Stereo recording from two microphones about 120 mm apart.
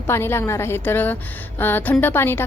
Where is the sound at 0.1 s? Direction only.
20° left (ahead or behind).